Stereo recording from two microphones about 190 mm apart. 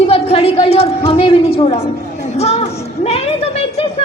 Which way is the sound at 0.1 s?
30° left (ahead or behind).